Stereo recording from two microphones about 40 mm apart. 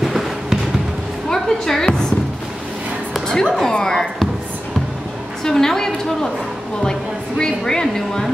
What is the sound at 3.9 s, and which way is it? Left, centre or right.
Speech, centre.